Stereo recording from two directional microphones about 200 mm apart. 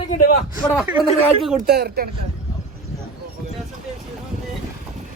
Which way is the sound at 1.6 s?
50° right (ahead or behind).